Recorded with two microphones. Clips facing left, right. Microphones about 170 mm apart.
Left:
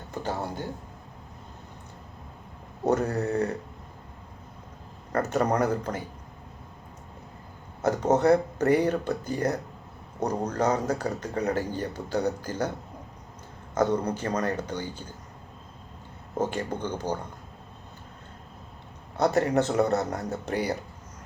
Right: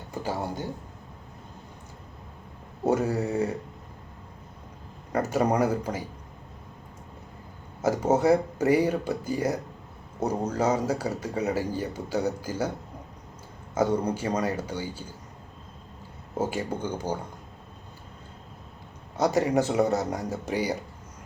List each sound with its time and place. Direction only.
0.1 s a man's voice: 10° right (ahead or behind)
2.8 s a man's voice: 10° right (ahead or behind)
5.1 s a man's voice: 10° right (ahead or behind)
7.8 s a man's voice: 10° right (ahead or behind)
13.7 s a man's voice: 10° right (ahead or behind)
16.4 s a man's voice: 10° right (ahead or behind)
19.2 s a man's voice: 10° right (ahead or behind)